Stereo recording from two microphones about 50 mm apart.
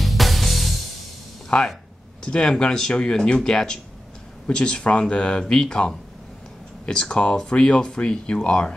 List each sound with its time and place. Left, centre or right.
0.0 s music: centre
1.5 s speech: left